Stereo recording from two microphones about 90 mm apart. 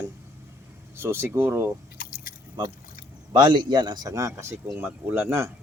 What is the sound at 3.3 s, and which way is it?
Speech, 55° right (ahead or behind).